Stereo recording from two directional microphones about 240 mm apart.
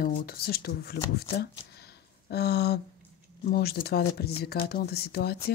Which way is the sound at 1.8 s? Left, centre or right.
Left.